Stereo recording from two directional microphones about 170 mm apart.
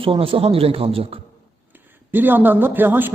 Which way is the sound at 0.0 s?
30° right (ahead or behind).